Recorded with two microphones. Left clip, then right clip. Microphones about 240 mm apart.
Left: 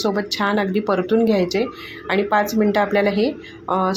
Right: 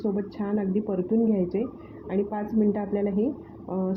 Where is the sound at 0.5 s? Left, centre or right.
Left.